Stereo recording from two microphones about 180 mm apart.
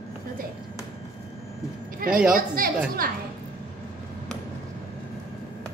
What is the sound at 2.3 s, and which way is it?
Music, 50° right (ahead or behind).